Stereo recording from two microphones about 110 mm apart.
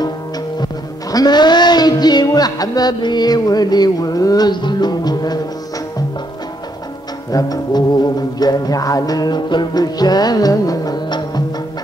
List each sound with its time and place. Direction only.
1.1 s music: 40° left (ahead or behind)
7.2 s music: 35° left (ahead or behind)